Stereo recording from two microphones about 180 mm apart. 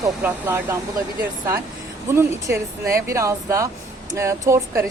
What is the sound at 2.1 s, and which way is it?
Speech, 15° right (ahead or behind).